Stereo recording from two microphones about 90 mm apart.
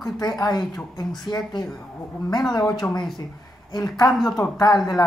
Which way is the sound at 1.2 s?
50° left (ahead or behind).